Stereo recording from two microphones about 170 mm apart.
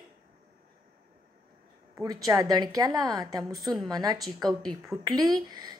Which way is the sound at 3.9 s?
20° right (ahead or behind).